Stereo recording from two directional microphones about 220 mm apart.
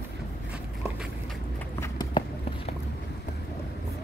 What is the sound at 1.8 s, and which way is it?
Run, 20° left (ahead or behind).